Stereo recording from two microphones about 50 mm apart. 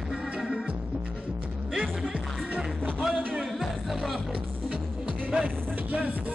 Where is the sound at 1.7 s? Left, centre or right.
Centre.